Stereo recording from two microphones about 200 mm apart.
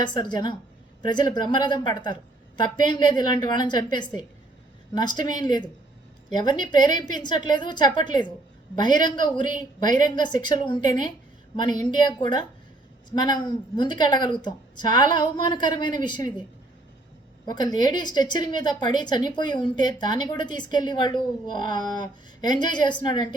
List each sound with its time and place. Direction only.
0.0 s a woman's voice: 20° left (ahead or behind)
17.4 s a woman's voice: 20° left (ahead or behind)